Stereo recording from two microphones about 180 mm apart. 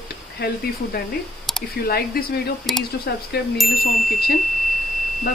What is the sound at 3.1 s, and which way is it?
Speech, 60° left (ahead or behind).